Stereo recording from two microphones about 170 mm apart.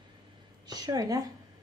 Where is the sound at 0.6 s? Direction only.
25° right (ahead or behind).